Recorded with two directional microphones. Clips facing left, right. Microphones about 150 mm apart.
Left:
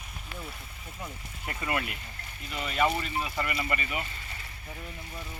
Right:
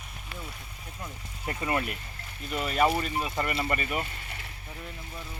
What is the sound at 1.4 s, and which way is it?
Speech, 30° right (ahead or behind).